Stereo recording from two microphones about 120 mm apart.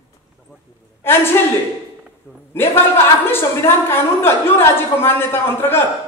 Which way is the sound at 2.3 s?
20° left (ahead or behind).